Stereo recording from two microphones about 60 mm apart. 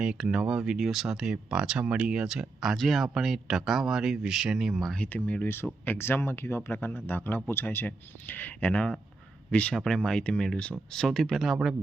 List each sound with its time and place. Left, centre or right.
0.0 s speech: centre
5.0 s speech: left
5.8 s a man's voice: left
6.7 s a man's voice: left
9.7 s speech: centre